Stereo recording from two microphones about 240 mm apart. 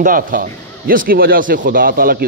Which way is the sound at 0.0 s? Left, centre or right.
Right.